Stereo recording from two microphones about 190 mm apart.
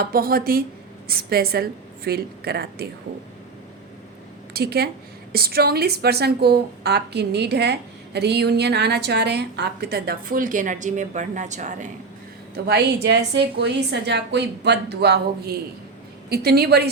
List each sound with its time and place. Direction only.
0.0 s a woman's voice: 50° right (ahead or behind)
4.5 s a woman's voice: 55° right (ahead or behind); by 11.9 s 40° right (ahead or behind)
12.5 s a woman's voice: 60° right (ahead or behind)